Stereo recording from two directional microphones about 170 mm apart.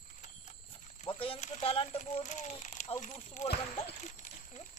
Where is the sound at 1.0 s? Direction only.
30° left (ahead or behind).